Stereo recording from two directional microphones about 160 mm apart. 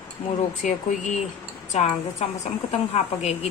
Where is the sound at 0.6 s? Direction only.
50° left (ahead or behind).